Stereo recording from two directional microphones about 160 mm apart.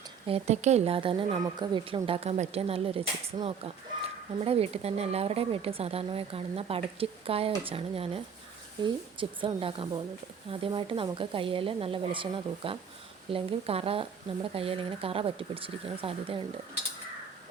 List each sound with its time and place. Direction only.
0.3 s speech: 40° right (ahead or behind)